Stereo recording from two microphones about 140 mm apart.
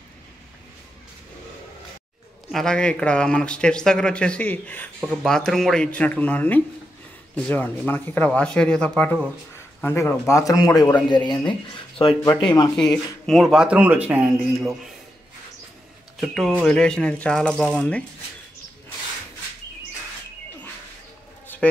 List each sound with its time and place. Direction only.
2.5 s a man's voice: 5° left (ahead or behind); by 12.7 s 30° left (ahead or behind)
13.3 s a man's voice: centre (ahead or behind)
16.2 s a man's voice: centre (ahead or behind)